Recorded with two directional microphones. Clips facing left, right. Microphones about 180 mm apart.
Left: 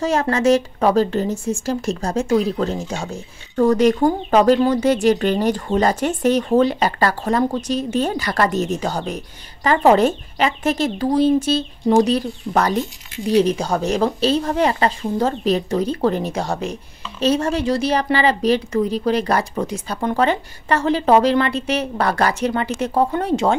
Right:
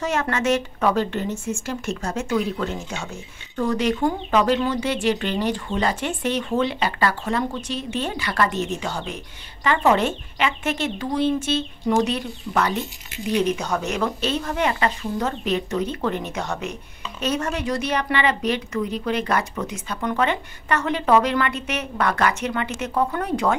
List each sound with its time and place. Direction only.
0.0 s speech: 35° left (ahead or behind)